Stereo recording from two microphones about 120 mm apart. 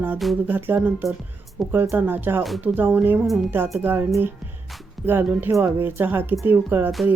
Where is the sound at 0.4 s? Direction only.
15° right (ahead or behind).